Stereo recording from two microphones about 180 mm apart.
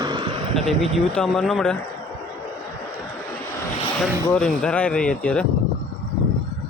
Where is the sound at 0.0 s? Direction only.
25° right (ahead or behind).